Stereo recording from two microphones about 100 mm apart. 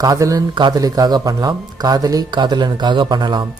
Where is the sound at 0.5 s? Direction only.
50° right (ahead or behind).